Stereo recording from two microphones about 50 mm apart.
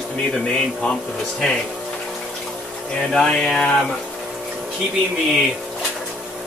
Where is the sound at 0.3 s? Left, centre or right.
Centre.